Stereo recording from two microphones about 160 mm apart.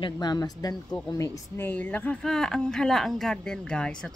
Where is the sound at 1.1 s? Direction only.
20° left (ahead or behind).